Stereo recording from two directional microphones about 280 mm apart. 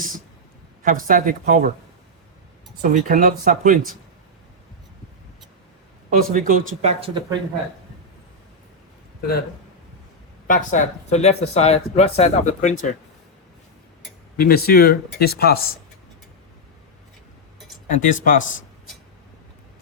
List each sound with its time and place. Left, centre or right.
0.8 s speech: right
2.8 s speech: right
6.1 s speech: right
10.4 s speech: left
14.3 s speech: left
17.9 s speech: left